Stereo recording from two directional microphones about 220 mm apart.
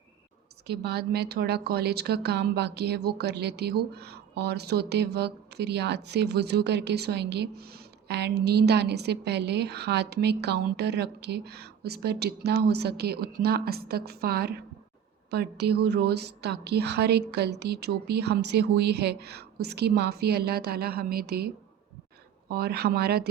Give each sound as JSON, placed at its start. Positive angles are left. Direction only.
{"t": 0.7, "sound": "a woman's voice", "side_deg": -45}
{"t": 15.9, "sound": "a woman's voice", "side_deg": -50}